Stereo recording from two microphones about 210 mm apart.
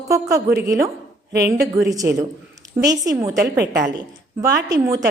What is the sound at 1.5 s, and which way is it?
A woman's voice, 15° right (ahead or behind).